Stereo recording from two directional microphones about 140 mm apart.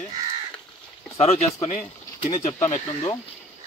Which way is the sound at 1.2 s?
45° left (ahead or behind).